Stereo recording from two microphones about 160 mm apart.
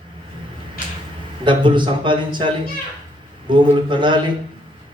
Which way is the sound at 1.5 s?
30° right (ahead or behind).